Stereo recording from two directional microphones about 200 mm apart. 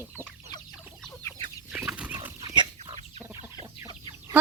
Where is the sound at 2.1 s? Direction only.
15° right (ahead or behind).